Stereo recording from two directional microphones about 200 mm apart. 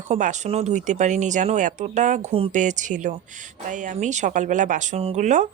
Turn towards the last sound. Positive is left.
turn(degrees=-35)  # may be behind; listen again after turning